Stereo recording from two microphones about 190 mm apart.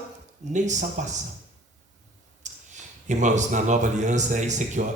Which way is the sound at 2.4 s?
40° right (ahead or behind).